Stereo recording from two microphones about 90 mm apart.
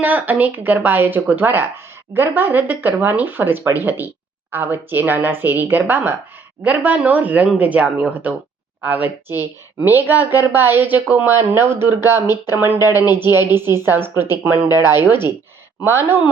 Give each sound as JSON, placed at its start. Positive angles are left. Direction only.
{"t": 0.0, "sound": "a woman's voice", "side_deg": -20}
{"t": 12.9, "sound": "speech", "side_deg": 45}
{"t": 13.3, "sound": "a woman's voice", "side_deg": -25}